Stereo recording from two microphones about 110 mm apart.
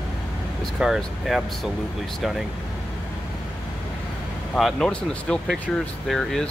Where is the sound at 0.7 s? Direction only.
5° right (ahead or behind).